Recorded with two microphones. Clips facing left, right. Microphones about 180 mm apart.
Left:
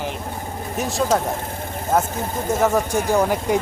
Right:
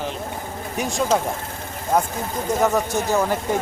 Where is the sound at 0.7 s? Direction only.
Centre (ahead or behind).